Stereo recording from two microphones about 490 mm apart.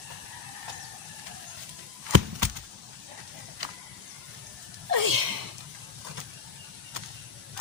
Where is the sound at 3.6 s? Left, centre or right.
Right.